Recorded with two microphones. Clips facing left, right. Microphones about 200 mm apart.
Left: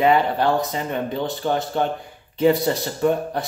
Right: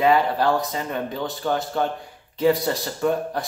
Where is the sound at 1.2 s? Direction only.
25° left (ahead or behind).